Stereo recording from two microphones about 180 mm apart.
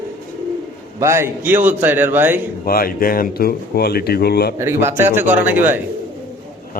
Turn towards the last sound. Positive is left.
turn(degrees=-10)  # may be behind; listen again after turning